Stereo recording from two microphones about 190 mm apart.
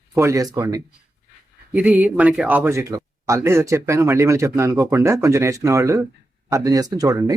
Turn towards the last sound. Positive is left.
turn(degrees=-20)  # may be behind; listen again after turning